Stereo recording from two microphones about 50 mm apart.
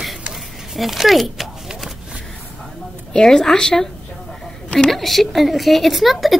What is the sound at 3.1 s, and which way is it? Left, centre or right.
Speech, centre.